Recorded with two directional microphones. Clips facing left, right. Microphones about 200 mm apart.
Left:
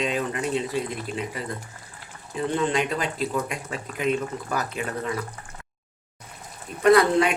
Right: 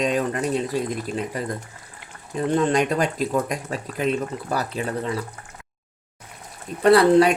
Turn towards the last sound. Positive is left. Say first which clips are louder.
# right 3 dB
turn(degrees=-35)  # may be behind; listen again after turning